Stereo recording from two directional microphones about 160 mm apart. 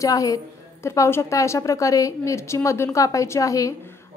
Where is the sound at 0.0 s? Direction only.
20° left (ahead or behind).